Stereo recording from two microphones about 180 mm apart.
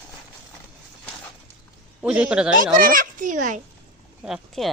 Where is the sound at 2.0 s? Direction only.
5° right (ahead or behind).